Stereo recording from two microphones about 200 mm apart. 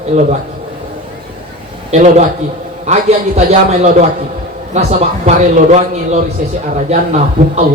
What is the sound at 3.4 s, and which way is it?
Speech, 35° right (ahead or behind).